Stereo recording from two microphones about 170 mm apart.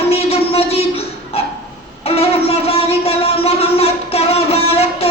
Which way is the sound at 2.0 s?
35° left (ahead or behind).